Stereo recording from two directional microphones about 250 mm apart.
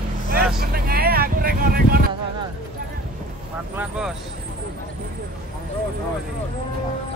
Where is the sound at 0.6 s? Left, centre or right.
Right.